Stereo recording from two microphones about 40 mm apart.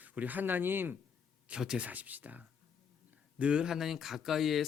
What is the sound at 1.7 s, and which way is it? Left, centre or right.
Speech, right.